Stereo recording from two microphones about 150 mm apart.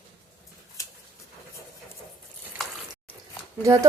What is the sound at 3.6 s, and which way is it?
Speech, 20° right (ahead or behind).